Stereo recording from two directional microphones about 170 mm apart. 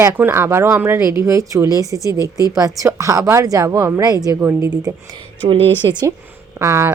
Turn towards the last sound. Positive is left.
turn(degrees=-15)  # may be behind; listen again after turning